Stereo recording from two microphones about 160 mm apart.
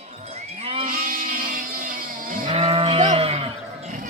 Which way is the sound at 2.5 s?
40° right (ahead or behind).